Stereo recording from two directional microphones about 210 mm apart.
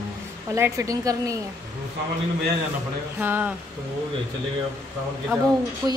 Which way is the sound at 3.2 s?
10° right (ahead or behind).